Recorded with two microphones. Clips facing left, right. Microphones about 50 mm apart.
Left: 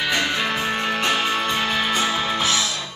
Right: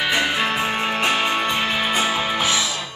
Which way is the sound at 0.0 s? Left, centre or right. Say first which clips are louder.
Right 2 dB; centre.